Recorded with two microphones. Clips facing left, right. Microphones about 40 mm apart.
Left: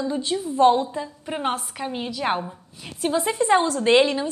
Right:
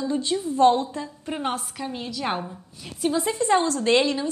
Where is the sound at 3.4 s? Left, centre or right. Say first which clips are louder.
Left 2 dB; left.